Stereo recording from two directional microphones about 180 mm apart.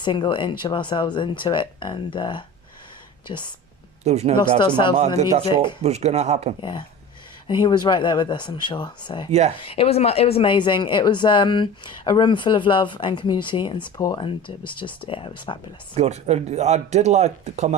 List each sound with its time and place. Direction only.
0.0 s speech: 25° left (ahead or behind)
4.0 s speech: 35° right (ahead or behind)
4.4 s speech: 25° left (ahead or behind)
4.9 s speech: 40° right (ahead or behind)
6.6 s speech: 25° left (ahead or behind)
16.0 s speech: 35° right (ahead or behind)